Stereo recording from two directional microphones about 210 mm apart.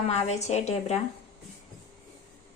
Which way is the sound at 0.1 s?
30° left (ahead or behind).